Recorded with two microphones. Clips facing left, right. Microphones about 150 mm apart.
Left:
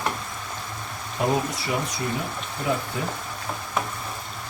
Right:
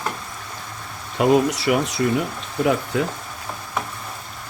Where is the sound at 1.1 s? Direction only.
80° right.